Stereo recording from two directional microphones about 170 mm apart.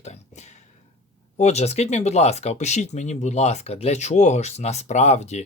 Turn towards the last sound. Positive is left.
turn(degrees=40)  # may be behind; listen again after turning